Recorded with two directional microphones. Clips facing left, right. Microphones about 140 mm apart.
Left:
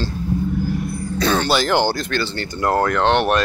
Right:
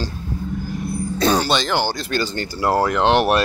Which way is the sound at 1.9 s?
15° right (ahead or behind).